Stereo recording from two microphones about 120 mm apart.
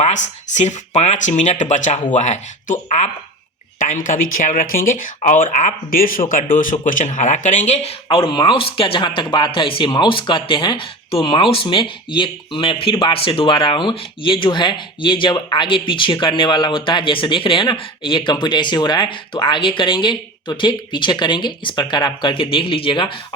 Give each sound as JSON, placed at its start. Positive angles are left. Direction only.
{"t": 0.0, "sound": "speech", "side_deg": 75}
{"t": 2.1, "sound": "speech", "side_deg": 80}
{"t": 8.0, "sound": "speech", "side_deg": 45}